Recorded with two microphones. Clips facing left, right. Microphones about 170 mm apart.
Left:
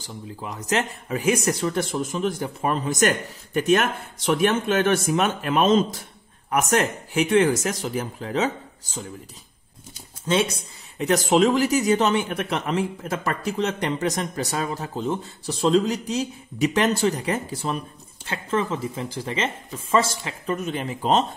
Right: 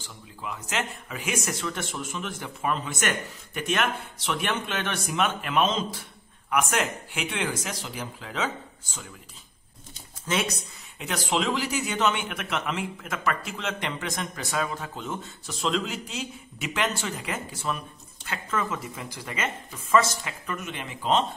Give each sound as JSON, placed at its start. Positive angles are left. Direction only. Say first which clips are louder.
{"t": 0.0, "sound": "speech", "louder": "left 5 dB", "side_deg": 35}
{"t": 10.2, "sound": "speech", "louder": "left 6 dB", "side_deg": 30}
{"t": 11.0, "sound": "speech", "louder": "left 9 dB", "side_deg": 45}